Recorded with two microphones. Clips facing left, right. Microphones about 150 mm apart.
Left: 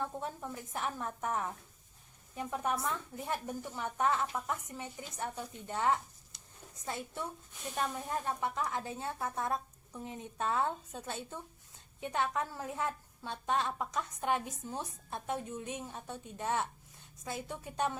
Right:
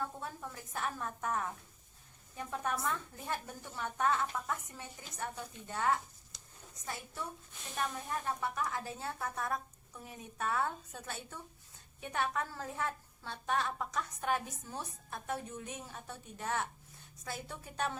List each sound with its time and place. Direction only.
0.0 s a woman's voice: 20° left (ahead or behind)